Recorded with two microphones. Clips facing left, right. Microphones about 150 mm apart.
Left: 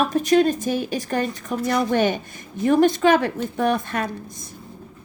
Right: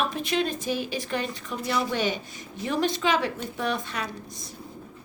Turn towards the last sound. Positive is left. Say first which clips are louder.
# left 6 dB
turn(degrees=50)  # may be behind; listen again after turning